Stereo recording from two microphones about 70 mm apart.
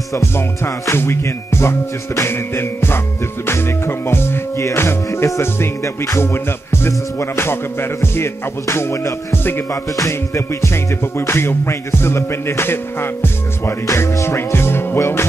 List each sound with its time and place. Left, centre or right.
0.7 s music: left
9.3 s music: left
9.9 s music: left